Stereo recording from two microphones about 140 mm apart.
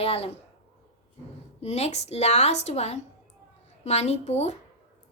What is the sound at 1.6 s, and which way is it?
Speech, 50° left (ahead or behind).